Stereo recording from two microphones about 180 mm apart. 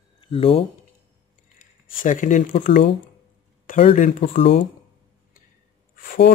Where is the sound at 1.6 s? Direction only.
45° left (ahead or behind).